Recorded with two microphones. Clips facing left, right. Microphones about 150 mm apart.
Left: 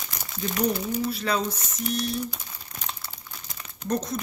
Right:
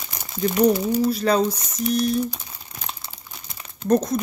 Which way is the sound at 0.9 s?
40° right (ahead or behind).